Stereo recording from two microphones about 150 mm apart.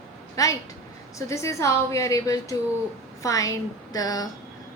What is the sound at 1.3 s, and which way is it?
A woman's voice, 20° left (ahead or behind).